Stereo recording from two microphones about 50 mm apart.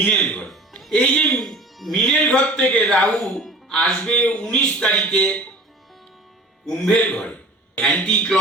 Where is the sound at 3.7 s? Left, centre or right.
Centre.